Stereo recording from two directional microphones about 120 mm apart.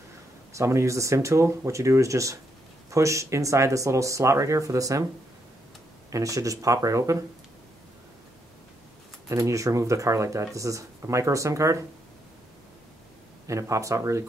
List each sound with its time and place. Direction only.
0.5 s speech: 25° right (ahead or behind)
6.1 s speech: 30° right (ahead or behind)
9.3 s speech: 25° right (ahead or behind)
13.5 s speech: 25° right (ahead or behind)